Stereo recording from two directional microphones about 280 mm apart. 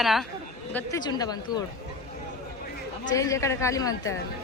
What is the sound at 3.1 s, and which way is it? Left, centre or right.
Speech, centre.